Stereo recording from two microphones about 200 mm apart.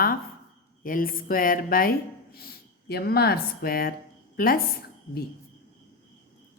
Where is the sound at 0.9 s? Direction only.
45° left (ahead or behind).